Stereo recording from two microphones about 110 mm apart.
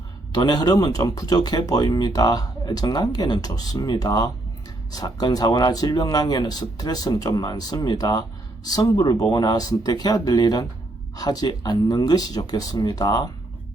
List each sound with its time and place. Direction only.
0.3 s speech: 35° left (ahead or behind)